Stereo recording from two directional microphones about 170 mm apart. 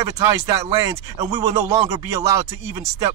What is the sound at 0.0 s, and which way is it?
Speech, 20° right (ahead or behind).